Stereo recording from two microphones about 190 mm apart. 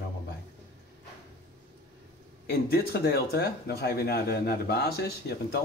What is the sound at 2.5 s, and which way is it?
Speech, 55° left (ahead or behind).